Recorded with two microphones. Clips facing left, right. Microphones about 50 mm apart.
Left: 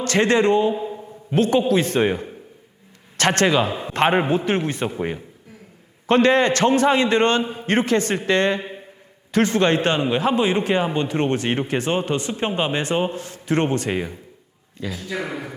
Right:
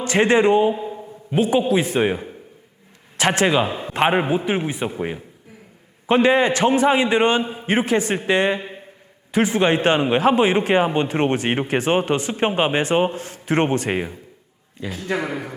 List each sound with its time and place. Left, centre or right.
0.0 s a man's voice: centre
0.7 s a man's voice: centre
10.2 s a man's voice: right
14.8 s a man's voice: centre
15.2 s a man's voice: right